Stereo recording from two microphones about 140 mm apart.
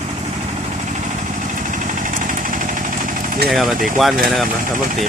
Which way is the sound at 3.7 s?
75° right (ahead or behind).